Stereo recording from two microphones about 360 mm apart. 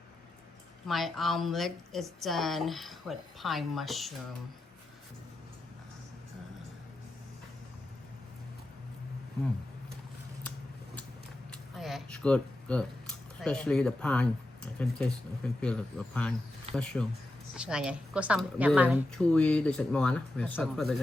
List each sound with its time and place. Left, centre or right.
0.9 s a woman's voice: centre
11.8 s a woman's voice: centre